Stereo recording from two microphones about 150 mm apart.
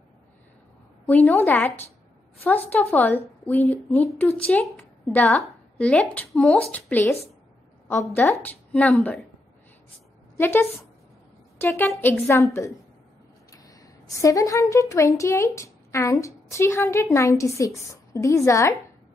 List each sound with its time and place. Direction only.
1.0 s a woman's voice: 10° left (ahead or behind)
10.3 s a woman's voice: 15° left (ahead or behind)
13.5 s a woman's voice: 20° left (ahead or behind)